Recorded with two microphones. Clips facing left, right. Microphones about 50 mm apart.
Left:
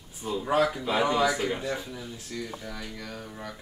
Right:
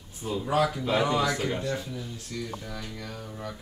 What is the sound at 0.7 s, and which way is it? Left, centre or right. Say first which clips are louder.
Speech: even; centre.